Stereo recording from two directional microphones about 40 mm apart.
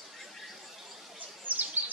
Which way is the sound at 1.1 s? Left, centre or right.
Right.